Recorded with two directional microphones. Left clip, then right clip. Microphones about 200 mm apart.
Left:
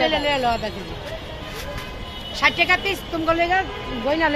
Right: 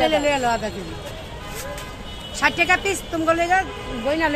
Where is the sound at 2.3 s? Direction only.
55° right (ahead or behind).